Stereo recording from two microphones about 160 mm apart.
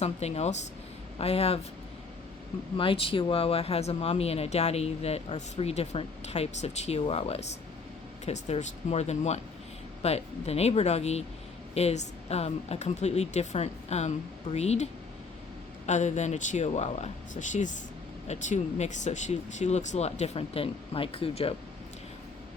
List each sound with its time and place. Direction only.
0.0 s speech: 40° left (ahead or behind)
2.7 s speech: 35° left (ahead or behind)
15.9 s speech: 45° left (ahead or behind)